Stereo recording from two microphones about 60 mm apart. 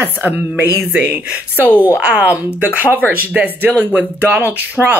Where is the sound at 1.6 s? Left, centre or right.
Left.